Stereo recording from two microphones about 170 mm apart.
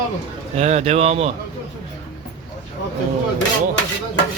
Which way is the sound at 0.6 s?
40° right (ahead or behind).